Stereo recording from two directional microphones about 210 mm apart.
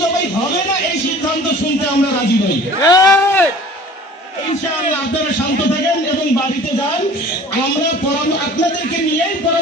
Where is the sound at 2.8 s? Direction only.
15° left (ahead or behind).